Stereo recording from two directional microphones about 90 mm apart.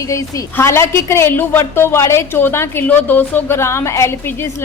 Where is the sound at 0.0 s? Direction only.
40° left (ahead or behind).